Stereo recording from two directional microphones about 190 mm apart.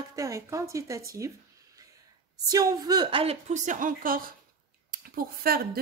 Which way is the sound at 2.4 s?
20° right (ahead or behind).